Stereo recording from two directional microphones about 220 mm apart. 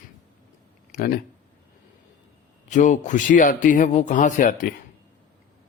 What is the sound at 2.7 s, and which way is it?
Speech, 35° left (ahead or behind).